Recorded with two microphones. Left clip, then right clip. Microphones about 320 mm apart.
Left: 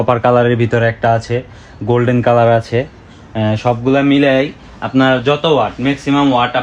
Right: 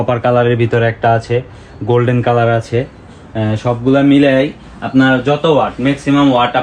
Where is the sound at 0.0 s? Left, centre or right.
Left.